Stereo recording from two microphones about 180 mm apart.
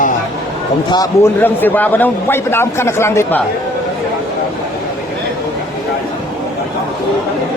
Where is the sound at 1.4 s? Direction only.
10° left (ahead or behind).